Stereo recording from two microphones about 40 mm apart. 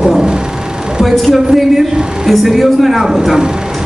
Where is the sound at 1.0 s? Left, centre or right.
Centre.